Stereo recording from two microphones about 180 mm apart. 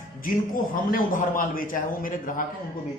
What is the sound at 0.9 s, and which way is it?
A man's voice, 50° left (ahead or behind).